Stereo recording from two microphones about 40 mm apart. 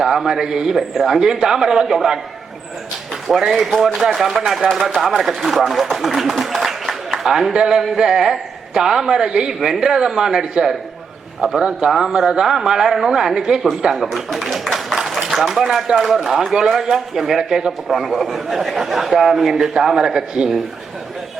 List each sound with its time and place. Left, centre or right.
0.0 s a man's voice: centre
3.2 s a man's voice: centre
5.9 s a sound: centre
7.3 s a man's voice: centre
13.8 s a sound: centre
15.2 s a man's voice: centre